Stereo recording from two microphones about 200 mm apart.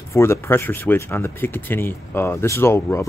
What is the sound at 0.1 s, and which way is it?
Speech, 15° left (ahead or behind).